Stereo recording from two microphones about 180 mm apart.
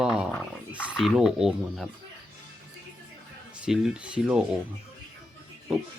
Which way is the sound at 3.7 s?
5° right (ahead or behind).